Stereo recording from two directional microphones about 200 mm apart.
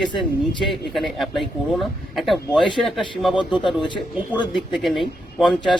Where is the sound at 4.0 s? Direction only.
5° right (ahead or behind).